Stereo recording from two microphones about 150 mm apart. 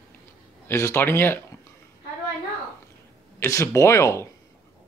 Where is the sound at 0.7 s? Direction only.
15° left (ahead or behind).